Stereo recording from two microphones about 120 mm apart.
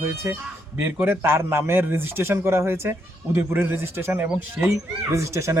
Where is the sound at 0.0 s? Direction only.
20° right (ahead or behind).